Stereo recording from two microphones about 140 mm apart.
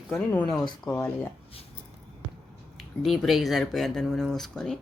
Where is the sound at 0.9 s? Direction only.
15° left (ahead or behind).